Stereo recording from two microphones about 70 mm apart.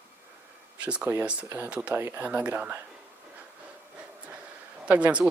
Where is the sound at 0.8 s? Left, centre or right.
Centre.